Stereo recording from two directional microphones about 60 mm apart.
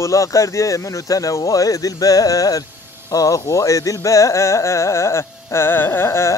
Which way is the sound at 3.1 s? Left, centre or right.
Left.